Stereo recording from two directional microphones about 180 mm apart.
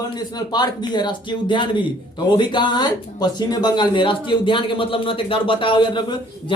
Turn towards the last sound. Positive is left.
turn(degrees=25)  # may be behind; listen again after turning